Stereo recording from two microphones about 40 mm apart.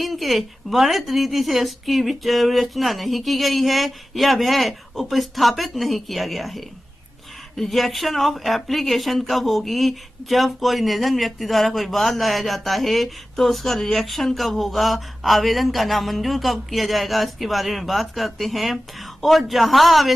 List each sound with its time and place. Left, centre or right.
0.0 s speech: centre